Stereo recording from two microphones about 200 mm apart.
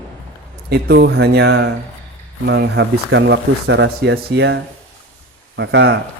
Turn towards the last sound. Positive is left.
turn(degrees=-65)  # may be behind; listen again after turning